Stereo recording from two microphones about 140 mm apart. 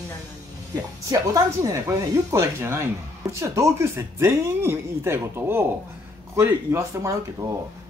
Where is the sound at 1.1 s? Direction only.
25° right (ahead or behind).